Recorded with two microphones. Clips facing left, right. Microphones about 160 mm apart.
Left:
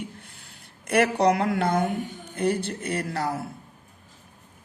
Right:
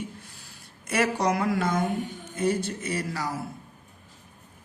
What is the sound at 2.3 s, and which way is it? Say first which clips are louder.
Speech: left 1 dB; 60° left (ahead or behind).